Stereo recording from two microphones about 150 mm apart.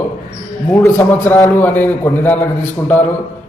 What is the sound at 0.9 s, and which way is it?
A man's voice, 15° left (ahead or behind).